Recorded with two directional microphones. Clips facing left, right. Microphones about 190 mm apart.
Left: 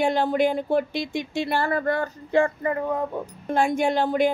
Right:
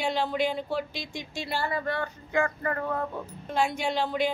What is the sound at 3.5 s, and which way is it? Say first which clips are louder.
Speech: left 6 dB; 50° left (ahead or behind).